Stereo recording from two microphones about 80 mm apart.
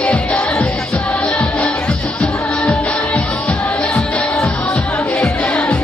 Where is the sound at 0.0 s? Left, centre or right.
Centre.